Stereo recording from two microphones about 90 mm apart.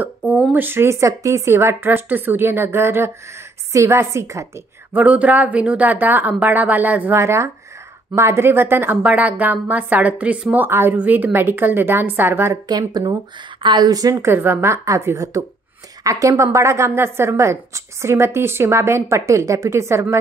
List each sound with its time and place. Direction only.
0.3 s a woman's voice: 20° right (ahead or behind); by 4.5 s 35° right (ahead or behind)
4.9 s a woman's voice: 15° right (ahead or behind)
7.2 s a woman's voice: 35° right (ahead or behind)
12.6 s speech: 50° right (ahead or behind)
13.6 s speech: 55° right (ahead or behind)
14.1 s a woman's voice: 25° right (ahead or behind)